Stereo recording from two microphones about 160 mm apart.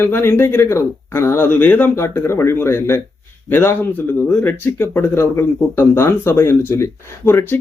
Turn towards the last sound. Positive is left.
turn(degrees=15)  # may be behind; listen again after turning